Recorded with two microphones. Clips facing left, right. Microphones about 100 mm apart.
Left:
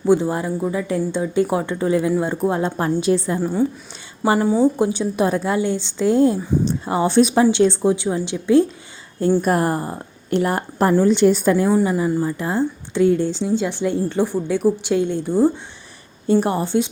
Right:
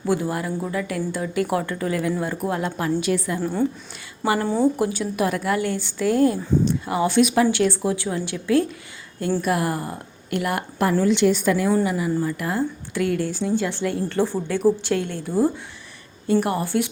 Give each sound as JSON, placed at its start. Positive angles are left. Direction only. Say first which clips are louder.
{"t": 0.0, "sound": "speech", "louder": "left 6 dB", "side_deg": 25}
{"t": 3.4, "sound": "a woman's voice", "louder": "left 3 dB", "side_deg": 10}
{"t": 4.6, "sound": "a woman's voice", "louder": "left 3 dB", "side_deg": 25}
{"t": 9.4, "sound": "a woman's voice", "louder": "left 4 dB", "side_deg": 40}